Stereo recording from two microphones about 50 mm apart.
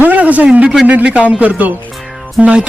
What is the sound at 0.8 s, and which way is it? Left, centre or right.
Speech, right.